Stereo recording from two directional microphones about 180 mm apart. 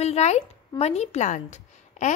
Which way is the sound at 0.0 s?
35° left (ahead or behind).